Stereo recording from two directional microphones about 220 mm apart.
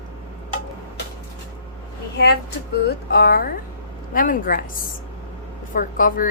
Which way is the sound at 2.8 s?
45° left (ahead or behind).